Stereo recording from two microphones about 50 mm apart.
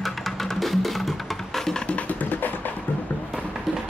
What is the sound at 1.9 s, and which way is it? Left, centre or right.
Music, left.